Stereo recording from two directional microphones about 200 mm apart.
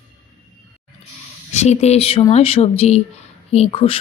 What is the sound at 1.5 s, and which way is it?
A woman's voice, 35° left (ahead or behind).